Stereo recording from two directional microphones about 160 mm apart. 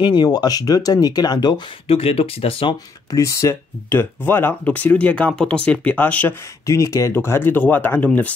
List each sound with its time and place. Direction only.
0.0 s speech: 25° left (ahead or behind)
3.1 s speech: 20° left (ahead or behind)